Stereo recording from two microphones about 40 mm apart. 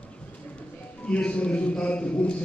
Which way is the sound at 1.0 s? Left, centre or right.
Left.